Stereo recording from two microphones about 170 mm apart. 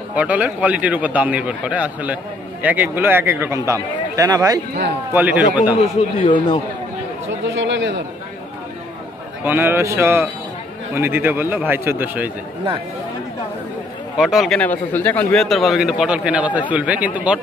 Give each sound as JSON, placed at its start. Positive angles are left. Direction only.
{"t": 0.1, "sound": "a man's voice", "side_deg": -10}
{"t": 5.1, "sound": "a man's voice", "side_deg": -10}
{"t": 5.8, "sound": "a man's voice", "side_deg": 35}
{"t": 7.5, "sound": "a sound", "side_deg": -90}
{"t": 9.4, "sound": "a man's voice", "side_deg": -10}
{"t": 14.1, "sound": "speech", "side_deg": 0}